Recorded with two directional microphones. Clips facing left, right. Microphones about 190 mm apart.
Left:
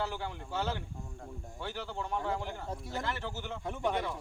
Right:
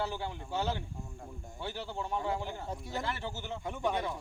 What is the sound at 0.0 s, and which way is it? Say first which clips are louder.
Speech: right 1 dB; 15° right (ahead or behind).